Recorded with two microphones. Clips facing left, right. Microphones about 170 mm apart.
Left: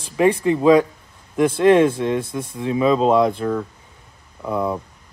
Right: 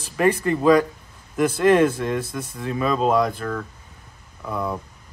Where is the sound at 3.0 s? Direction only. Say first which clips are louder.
Left 4 dB; 25° left (ahead or behind).